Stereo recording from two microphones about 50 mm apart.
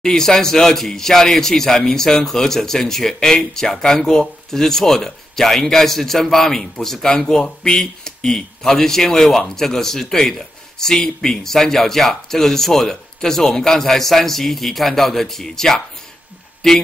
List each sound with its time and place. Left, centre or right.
0.0 s speech: centre